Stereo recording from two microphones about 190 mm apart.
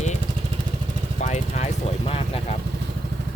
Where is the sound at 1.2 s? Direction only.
35° left (ahead or behind).